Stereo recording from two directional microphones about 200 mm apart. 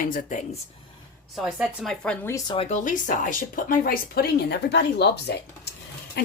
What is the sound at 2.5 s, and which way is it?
Speech, 30° left (ahead or behind).